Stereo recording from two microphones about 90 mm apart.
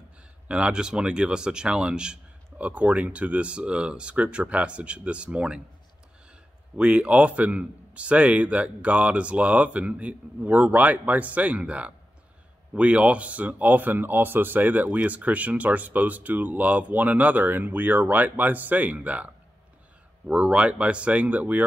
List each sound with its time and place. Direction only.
0.5 s a man's voice: 10° right (ahead or behind)
6.8 s a man's voice: 10° right (ahead or behind)